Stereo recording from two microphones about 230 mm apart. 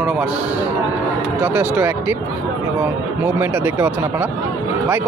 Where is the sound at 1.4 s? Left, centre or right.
Centre.